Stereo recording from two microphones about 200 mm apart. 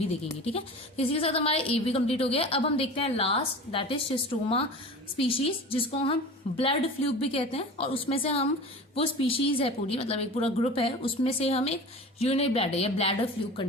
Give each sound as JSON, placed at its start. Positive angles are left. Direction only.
{"t": 0.5, "sound": "a woman's voice", "side_deg": 30}